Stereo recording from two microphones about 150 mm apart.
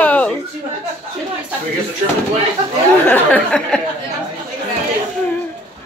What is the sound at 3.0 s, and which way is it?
Speech, 10° left (ahead or behind).